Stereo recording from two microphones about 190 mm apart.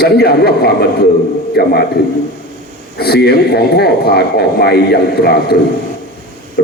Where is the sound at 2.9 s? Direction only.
55° left (ahead or behind).